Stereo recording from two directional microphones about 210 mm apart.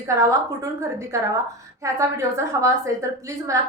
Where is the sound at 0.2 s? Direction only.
15° right (ahead or behind).